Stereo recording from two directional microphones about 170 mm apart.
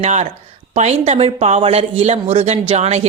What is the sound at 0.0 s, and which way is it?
Speech, 40° right (ahead or behind).